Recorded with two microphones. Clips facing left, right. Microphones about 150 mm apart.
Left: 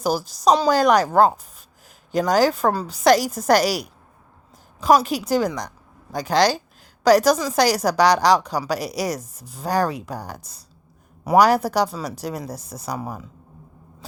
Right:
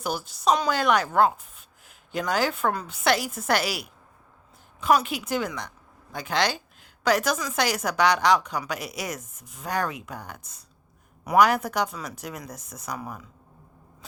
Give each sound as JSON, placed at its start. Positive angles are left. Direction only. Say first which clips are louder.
{"t": 0.0, "sound": "a woman's voice", "louder": "left 6 dB", "side_deg": 35}